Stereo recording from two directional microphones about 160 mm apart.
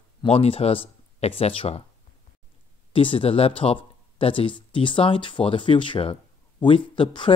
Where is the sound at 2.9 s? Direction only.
35° left (ahead or behind).